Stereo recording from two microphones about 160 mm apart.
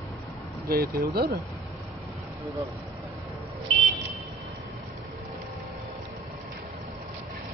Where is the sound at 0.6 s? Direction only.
70° right (ahead or behind).